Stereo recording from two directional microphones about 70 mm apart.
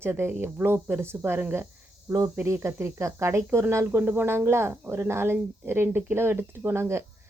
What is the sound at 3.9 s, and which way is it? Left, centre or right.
Speech, right.